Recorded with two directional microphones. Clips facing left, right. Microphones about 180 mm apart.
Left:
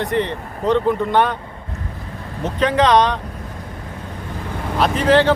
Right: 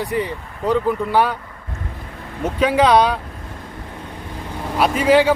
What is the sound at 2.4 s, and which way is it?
Speech, 10° right (ahead or behind).